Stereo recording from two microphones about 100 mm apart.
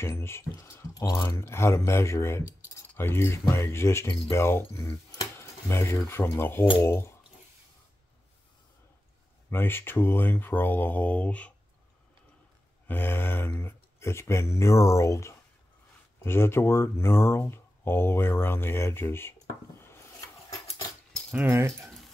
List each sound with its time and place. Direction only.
0.0 s speech: 25° left (ahead or behind)
9.5 s speech: 20° left (ahead or behind)
12.8 s speech: 20° left (ahead or behind)
19.8 s a sound: 25° left (ahead or behind)
21.3 s speech: 15° right (ahead or behind)